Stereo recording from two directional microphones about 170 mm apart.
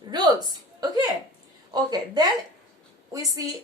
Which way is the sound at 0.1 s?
25° right (ahead or behind).